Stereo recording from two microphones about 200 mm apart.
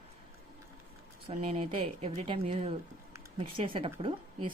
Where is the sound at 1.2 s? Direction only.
30° right (ahead or behind).